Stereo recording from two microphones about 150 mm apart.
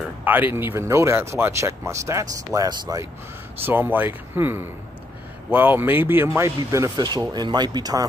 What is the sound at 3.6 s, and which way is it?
Speech, 15° right (ahead or behind).